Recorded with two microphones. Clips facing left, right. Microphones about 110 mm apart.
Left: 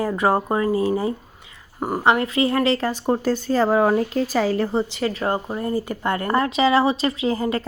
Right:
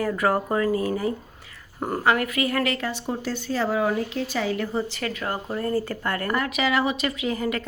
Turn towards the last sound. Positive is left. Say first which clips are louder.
# left 4 dB
turn(degrees=30)  # may be behind; listen again after turning